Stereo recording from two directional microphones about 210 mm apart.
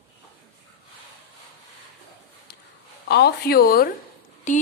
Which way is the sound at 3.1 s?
50° left (ahead or behind).